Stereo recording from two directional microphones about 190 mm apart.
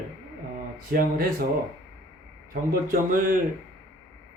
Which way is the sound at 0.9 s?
50° right (ahead or behind).